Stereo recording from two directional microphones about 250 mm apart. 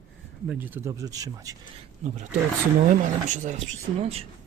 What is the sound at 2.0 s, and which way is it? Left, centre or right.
Speech, right.